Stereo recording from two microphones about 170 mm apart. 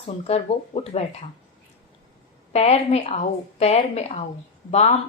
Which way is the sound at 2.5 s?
40° left (ahead or behind).